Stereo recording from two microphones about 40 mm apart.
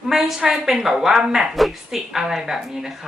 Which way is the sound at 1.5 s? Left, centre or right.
Centre.